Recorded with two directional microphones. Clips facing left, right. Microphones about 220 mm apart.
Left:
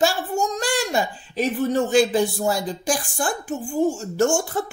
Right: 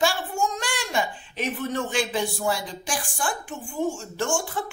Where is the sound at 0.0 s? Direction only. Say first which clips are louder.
Left 3 dB; 40° left (ahead or behind).